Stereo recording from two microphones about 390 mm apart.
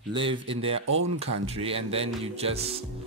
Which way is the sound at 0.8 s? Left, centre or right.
Right.